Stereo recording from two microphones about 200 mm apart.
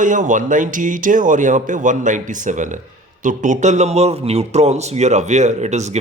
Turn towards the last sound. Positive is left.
turn(degrees=-35)  # may be behind; listen again after turning